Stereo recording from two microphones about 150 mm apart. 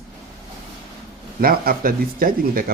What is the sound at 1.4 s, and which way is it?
Speech, 75° right (ahead or behind).